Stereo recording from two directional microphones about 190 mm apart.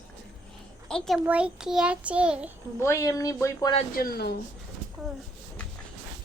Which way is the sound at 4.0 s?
55° left (ahead or behind).